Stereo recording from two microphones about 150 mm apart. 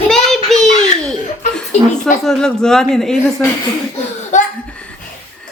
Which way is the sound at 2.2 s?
5° left (ahead or behind).